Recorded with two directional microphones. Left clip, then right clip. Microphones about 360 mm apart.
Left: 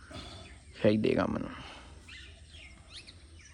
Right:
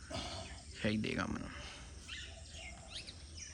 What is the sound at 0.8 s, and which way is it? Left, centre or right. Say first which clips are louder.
Speech: left 11 dB; centre.